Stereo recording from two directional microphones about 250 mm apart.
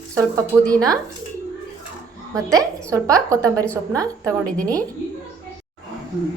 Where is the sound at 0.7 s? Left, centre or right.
Centre.